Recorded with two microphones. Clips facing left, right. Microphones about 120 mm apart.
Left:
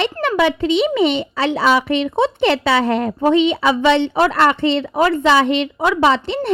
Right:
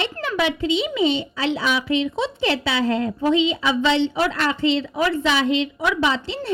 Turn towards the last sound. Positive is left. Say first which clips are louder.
# left 7 dB
turn(degrees=65)  # may be behind; listen again after turning